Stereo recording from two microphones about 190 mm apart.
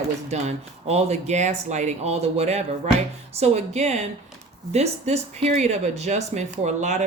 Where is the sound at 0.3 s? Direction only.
35° right (ahead or behind).